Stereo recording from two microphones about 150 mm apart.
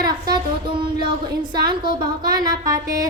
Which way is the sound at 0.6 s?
35° right (ahead or behind).